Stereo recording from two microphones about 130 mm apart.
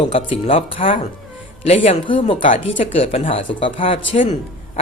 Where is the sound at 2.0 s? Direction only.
40° left (ahead or behind).